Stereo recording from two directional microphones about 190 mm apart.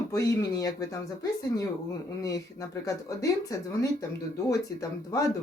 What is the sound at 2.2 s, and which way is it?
Speech, 20° left (ahead or behind).